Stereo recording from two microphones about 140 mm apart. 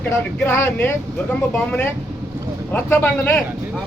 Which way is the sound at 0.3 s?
15° left (ahead or behind).